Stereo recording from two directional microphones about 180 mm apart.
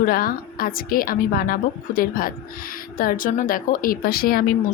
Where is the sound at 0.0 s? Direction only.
55° left (ahead or behind).